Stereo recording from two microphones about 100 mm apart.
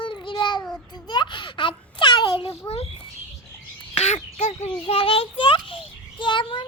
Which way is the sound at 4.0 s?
90° left.